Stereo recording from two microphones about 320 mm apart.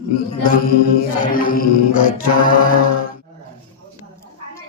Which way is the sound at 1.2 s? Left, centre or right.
Left.